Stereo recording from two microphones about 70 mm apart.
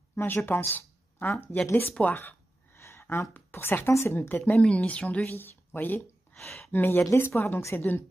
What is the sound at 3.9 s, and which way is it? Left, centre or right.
Speech, left.